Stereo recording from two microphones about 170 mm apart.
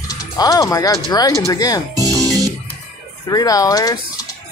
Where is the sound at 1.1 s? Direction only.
25° left (ahead or behind).